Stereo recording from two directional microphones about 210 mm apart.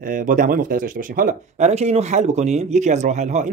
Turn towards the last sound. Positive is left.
turn(degrees=-35)  # may be behind; listen again after turning